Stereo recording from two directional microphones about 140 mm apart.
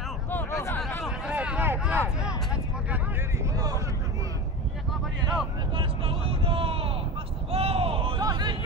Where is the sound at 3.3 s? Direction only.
25° right (ahead or behind).